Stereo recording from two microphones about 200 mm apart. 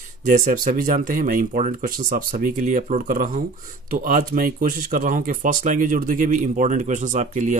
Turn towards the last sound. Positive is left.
turn(degrees=-40)  # may be behind; listen again after turning